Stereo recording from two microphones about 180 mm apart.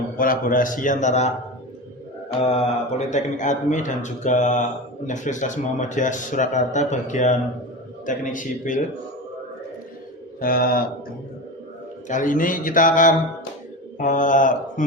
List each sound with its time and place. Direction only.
0.2 s a man's voice: 50° left (ahead or behind)
2.4 s a man's voice: 35° left (ahead or behind)
10.4 s a man's voice: 55° left (ahead or behind)
12.0 s a man's voice: 45° left (ahead or behind)